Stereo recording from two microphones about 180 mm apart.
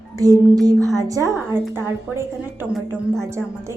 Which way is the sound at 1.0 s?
20° right (ahead or behind).